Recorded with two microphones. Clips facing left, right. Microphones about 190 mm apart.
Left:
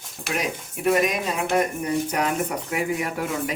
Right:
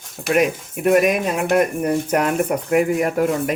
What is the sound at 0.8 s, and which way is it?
Speech, 55° right (ahead or behind).